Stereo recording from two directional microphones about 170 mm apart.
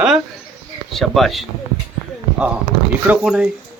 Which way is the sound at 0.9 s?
Centre (ahead or behind).